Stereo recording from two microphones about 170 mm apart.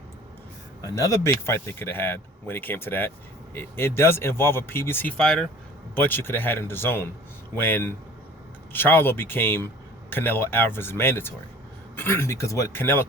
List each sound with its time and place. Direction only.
0.9 s speech: 20° left (ahead or behind)